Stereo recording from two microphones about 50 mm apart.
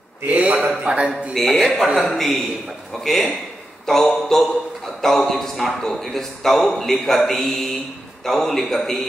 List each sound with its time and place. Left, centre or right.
0.3 s a sound: right
0.8 s speech: right
1.3 s a man's voice: centre
1.9 s a man's voice: centre
2.1 s a man's voice: centre